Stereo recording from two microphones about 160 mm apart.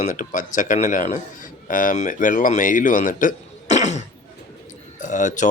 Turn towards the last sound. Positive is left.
turn(degrees=50)  # may be behind; listen again after turning